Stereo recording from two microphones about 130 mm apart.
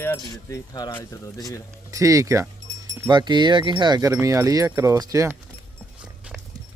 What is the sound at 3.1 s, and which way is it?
Speech, 35° right (ahead or behind).